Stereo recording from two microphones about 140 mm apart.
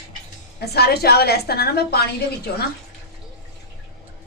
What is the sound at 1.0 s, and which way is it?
A woman's voice, 90° left.